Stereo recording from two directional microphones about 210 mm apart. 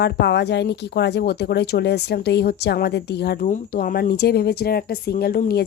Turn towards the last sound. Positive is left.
turn(degrees=45)  # may be behind; listen again after turning